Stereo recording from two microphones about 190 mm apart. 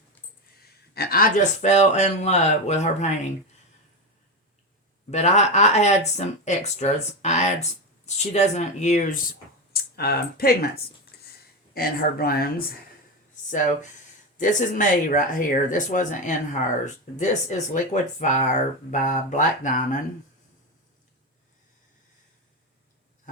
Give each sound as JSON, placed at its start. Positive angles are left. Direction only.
{"t": 0.6, "sound": "speech", "side_deg": 55}
{"t": 5.1, "sound": "speech", "side_deg": 35}
{"t": 9.7, "sound": "speech", "side_deg": 55}
{"t": 14.3, "sound": "speech", "side_deg": 40}